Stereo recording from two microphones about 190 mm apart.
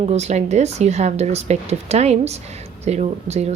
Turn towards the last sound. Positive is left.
turn(degrees=-35)  # may be behind; listen again after turning